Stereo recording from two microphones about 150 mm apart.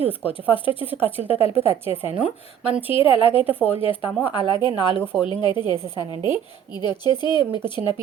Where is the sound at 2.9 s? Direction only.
35° left (ahead or behind).